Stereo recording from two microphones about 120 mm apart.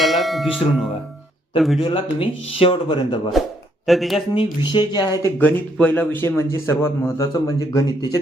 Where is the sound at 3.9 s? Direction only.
Centre (ahead or behind).